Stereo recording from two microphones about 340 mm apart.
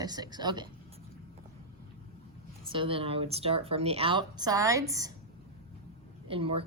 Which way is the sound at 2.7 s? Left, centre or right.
Centre.